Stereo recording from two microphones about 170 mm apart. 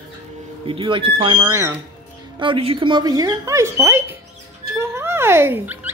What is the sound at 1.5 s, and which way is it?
Speech, 15° right (ahead or behind).